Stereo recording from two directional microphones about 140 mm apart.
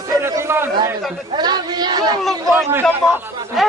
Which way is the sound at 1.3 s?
30° right (ahead or behind).